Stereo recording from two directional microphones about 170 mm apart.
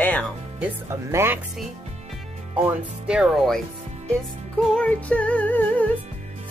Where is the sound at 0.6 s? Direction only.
15° right (ahead or behind).